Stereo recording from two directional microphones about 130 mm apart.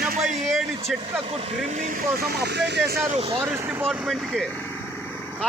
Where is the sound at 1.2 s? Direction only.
50° right (ahead or behind); by 2.1 s 80° right.